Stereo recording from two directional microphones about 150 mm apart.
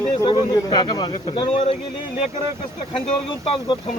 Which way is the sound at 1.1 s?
40° left (ahead or behind).